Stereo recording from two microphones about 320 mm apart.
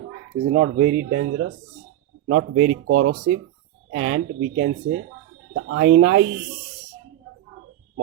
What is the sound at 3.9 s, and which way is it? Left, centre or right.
Speech, right.